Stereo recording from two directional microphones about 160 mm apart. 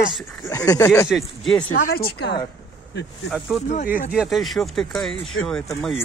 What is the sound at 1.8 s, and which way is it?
Speech, 70° left (ahead or behind).